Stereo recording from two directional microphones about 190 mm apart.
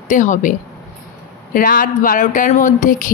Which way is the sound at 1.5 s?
45° left (ahead or behind).